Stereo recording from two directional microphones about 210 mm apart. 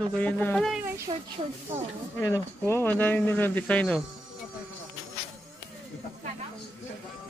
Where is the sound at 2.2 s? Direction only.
15° left (ahead or behind).